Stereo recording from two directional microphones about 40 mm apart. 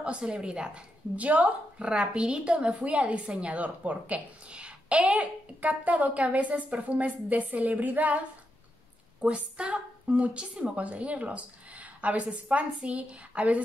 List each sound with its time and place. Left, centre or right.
0.0 s a woman's voice: right
1.8 s a woman's voice: right
2.7 s speech: right
9.2 s a woman's voice: right